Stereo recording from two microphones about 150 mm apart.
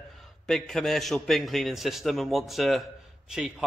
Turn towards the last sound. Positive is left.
turn(degrees=-5)  # may be behind; listen again after turning